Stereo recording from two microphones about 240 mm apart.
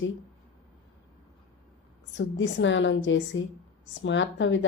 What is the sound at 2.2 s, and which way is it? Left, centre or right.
A woman's voice, left.